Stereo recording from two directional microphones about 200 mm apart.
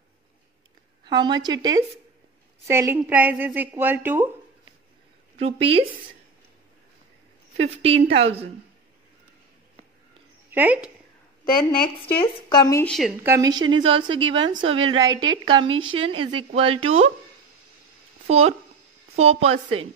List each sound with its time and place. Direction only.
1.0 s a woman's voice: 20° right (ahead or behind)
5.4 s a woman's voice: 30° right (ahead or behind)
7.7 s a woman's voice: 30° right (ahead or behind)
10.5 s speech: 10° right (ahead or behind)
11.4 s a woman's voice: 45° left (ahead or behind)
12.5 s a woman's voice: 20° left (ahead or behind)
12.8 s a woman's voice: centre (ahead or behind)
13.2 s a woman's voice: 15° right (ahead or behind)
18.3 s a woman's voice: 35° right (ahead or behind)